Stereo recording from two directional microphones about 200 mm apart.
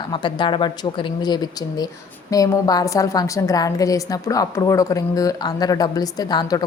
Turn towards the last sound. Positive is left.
turn(degrees=20)  # may be behind; listen again after turning